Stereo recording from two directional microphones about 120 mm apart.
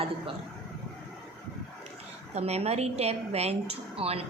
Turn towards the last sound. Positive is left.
turn(degrees=-55)  # may be behind; listen again after turning